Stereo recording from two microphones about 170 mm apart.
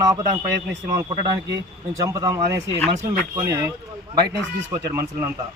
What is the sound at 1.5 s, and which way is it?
A man's voice, 20° right (ahead or behind).